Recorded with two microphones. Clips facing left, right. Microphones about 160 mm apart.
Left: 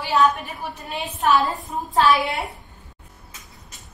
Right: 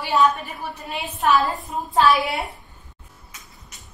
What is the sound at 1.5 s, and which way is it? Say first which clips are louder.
Speech: even; centre (ahead or behind).